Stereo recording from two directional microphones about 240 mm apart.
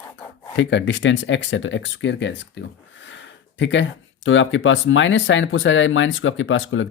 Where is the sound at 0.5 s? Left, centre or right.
Left.